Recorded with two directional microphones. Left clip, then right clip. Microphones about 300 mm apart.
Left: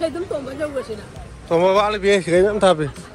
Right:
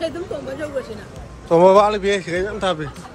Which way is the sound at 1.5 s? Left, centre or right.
Centre.